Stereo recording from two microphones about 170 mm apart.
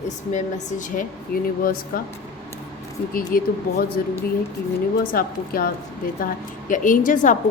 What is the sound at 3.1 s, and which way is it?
Speech, 60° left (ahead or behind).